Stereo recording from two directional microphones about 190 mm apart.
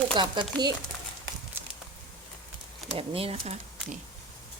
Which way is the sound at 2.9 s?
30° right (ahead or behind).